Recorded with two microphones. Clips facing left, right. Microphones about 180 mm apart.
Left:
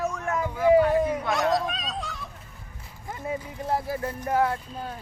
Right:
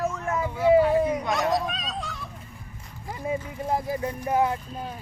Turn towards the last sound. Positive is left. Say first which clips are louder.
# right 1 dB
turn(degrees=-10)  # may be behind; listen again after turning